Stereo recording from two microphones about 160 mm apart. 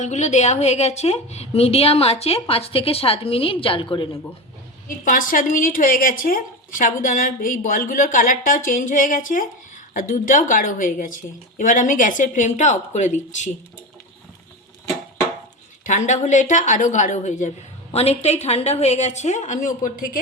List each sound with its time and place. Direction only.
0.0 s a woman's voice: 45° left (ahead or behind); by 4.1 s 30° left (ahead or behind)
5.0 s a woman's voice: 60° left (ahead or behind)
15.8 s a woman's voice: 50° left (ahead or behind)